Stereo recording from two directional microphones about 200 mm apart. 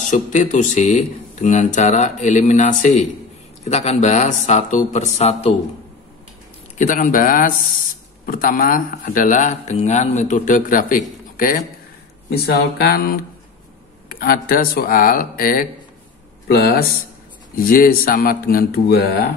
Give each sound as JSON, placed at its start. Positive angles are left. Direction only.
{"t": 0.1, "sound": "speech", "side_deg": 40}
{"t": 6.8, "sound": "speech", "side_deg": 40}